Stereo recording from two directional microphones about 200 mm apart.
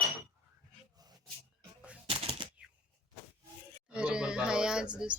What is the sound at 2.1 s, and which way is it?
Typewriter, 30° right (ahead or behind).